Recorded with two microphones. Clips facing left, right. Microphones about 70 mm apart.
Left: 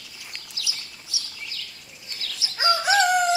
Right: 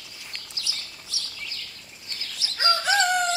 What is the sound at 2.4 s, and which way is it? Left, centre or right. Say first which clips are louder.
Chicken: left 2 dB; centre.